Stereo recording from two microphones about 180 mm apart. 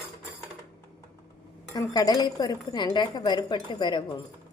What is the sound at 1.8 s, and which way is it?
A woman's voice, 20° left (ahead or behind).